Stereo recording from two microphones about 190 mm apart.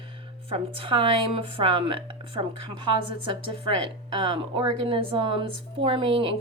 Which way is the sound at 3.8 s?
25° right (ahead or behind).